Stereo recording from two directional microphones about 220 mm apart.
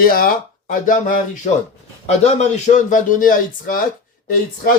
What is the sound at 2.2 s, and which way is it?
A man's voice, 30° left (ahead or behind).